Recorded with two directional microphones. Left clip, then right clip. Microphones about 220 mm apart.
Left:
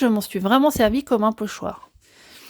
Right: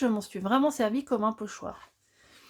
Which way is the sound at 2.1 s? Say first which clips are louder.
Left 11 dB; 45° left (ahead or behind).